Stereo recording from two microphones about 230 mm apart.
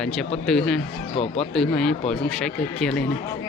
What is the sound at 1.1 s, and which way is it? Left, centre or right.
Speech, left.